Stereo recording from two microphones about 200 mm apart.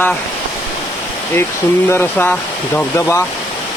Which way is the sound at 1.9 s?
10° left (ahead or behind).